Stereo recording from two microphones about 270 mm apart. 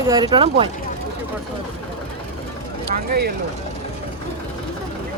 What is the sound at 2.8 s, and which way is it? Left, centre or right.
Speech, right.